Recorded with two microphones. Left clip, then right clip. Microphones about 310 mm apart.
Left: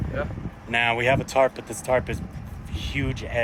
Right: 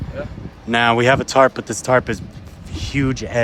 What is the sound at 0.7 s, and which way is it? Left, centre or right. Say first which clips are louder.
Speech: right 7 dB; right.